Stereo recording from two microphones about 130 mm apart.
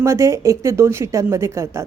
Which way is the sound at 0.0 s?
25° right (ahead or behind).